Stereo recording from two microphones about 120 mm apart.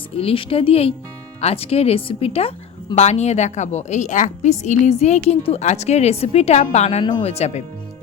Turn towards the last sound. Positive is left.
turn(degrees=65)  # may be behind; listen again after turning